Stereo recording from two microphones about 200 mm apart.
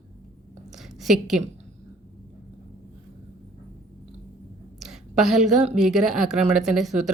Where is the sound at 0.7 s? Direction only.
Centre (ahead or behind).